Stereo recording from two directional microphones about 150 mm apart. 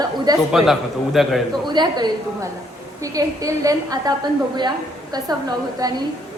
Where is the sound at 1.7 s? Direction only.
30° right (ahead or behind).